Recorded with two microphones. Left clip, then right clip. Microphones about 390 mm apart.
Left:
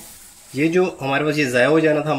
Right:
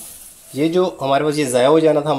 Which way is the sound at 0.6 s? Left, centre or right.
Centre.